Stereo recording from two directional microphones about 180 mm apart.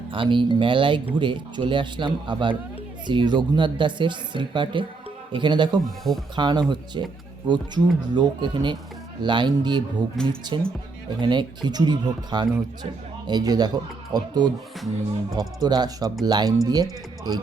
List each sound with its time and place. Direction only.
0.1 s speech: 30° right (ahead or behind)